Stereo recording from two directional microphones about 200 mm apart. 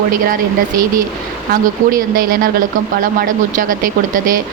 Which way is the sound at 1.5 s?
45° right (ahead or behind).